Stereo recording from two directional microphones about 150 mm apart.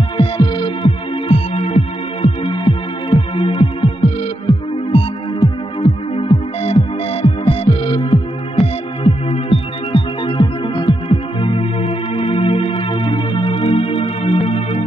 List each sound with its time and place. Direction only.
0.2 s music: 35° left (ahead or behind)